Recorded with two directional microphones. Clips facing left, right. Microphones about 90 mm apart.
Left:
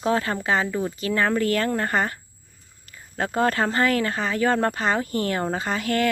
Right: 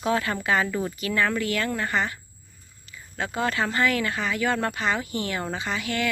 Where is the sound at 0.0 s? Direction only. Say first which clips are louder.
Left 2 dB; 35° left (ahead or behind).